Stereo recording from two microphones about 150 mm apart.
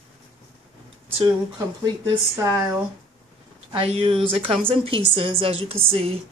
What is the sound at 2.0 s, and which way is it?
Speech, 20° right (ahead or behind).